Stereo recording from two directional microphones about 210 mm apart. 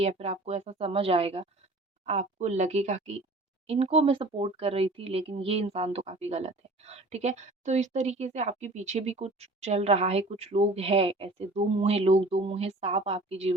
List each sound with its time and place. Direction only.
0.0 s speech: 30° right (ahead or behind)